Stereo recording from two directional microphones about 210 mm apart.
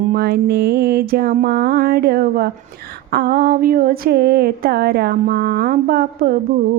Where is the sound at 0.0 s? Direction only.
45° right (ahead or behind).